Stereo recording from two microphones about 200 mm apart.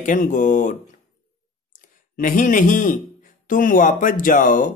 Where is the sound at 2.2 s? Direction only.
40° left (ahead or behind).